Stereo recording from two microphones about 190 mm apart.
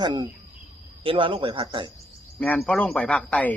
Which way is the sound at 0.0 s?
25° right (ahead or behind).